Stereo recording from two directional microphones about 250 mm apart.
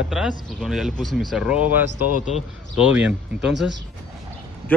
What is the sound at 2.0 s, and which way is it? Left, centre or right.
Speech, left.